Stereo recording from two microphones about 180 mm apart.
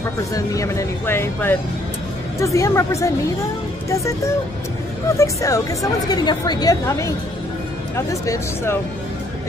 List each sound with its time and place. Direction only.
0.3 s a woman's voice: 15° left (ahead or behind)
5.2 s a woman's voice: 15° left (ahead or behind)